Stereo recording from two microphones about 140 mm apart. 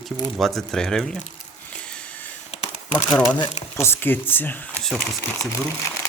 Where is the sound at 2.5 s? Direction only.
55° left (ahead or behind).